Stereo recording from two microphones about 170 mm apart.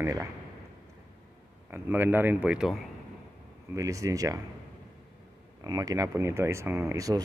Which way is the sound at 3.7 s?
20° right (ahead or behind).